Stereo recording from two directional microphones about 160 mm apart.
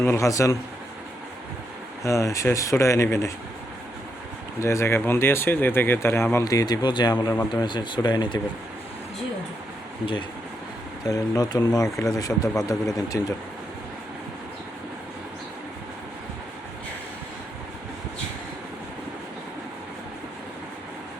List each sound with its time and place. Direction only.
0.1 s speech: 20° left (ahead or behind)
2.0 s speech: 20° left (ahead or behind)
4.6 s speech: 20° left (ahead or behind)
11.0 s speech: 25° left (ahead or behind)